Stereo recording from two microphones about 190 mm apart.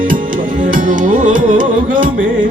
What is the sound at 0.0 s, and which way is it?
Music, 45° right (ahead or behind).